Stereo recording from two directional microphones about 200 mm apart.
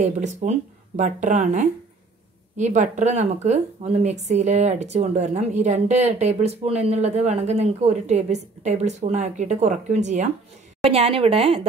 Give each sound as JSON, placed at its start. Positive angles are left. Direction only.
{"t": 0.0, "sound": "a woman's voice", "side_deg": -35}